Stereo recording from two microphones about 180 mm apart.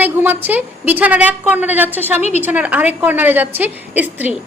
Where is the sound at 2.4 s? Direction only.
10° right (ahead or behind).